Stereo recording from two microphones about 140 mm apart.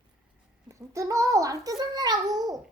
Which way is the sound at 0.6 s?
20° right (ahead or behind).